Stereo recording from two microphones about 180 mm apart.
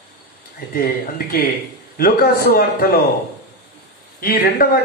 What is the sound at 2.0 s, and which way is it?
Speech, 55° left (ahead or behind).